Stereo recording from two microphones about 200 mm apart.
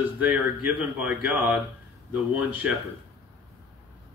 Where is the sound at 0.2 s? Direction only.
10° right (ahead or behind).